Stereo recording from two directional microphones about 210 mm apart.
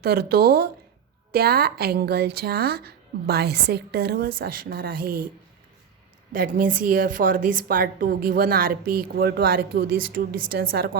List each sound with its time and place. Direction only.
0.0 s a woman's voice: 50° right (ahead or behind)
6.3 s a woman's voice: 40° right (ahead or behind)